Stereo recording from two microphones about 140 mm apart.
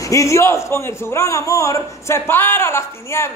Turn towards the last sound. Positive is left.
turn(degrees=20)  # may be behind; listen again after turning